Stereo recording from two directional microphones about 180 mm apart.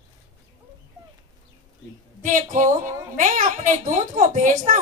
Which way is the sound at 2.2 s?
45° right (ahead or behind).